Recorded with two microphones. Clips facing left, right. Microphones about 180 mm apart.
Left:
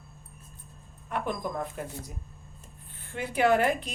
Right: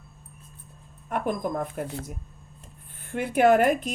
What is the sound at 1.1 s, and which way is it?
Speech, 50° right (ahead or behind).